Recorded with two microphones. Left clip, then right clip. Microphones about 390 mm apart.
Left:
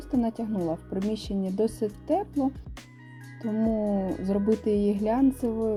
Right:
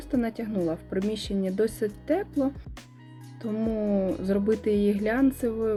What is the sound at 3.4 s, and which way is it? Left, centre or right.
A woman's voice, centre.